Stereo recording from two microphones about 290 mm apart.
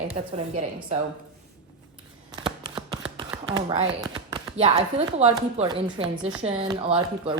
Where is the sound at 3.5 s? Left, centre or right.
Centre.